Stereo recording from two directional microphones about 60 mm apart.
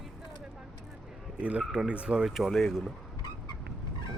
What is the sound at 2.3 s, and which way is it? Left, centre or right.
Speech, centre.